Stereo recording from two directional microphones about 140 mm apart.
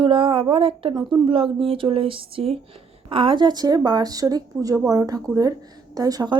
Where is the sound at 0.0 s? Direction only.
40° right (ahead or behind).